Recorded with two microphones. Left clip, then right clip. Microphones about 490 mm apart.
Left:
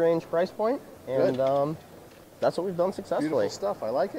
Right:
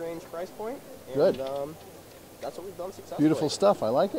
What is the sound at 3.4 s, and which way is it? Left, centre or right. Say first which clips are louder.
Speech: right 6 dB; right.